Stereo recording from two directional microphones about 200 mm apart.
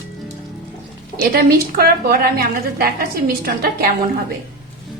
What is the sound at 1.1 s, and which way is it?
A woman's voice, 50° right (ahead or behind).